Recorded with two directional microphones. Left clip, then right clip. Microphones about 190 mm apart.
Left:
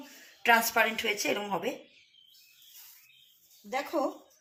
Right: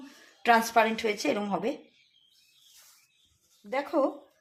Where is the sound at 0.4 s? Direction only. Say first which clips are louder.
Right 2 dB; 50° right (ahead or behind).